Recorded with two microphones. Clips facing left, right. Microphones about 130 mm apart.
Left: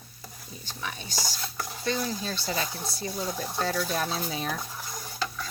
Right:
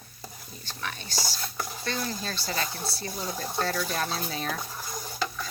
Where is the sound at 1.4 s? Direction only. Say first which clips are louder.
Right 1 dB; centre (ahead or behind).